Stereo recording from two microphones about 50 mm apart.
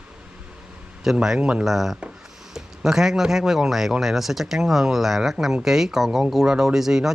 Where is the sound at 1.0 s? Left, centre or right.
Centre.